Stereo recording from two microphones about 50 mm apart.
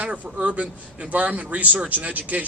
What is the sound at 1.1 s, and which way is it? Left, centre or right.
A man's voice, right.